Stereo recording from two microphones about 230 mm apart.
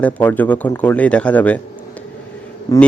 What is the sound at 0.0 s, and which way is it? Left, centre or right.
A man's voice, centre.